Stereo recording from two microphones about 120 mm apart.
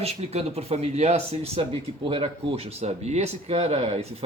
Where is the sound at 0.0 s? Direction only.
55° right (ahead or behind).